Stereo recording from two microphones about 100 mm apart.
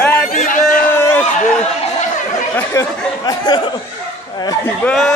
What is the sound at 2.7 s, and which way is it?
Speech, 35° left (ahead or behind).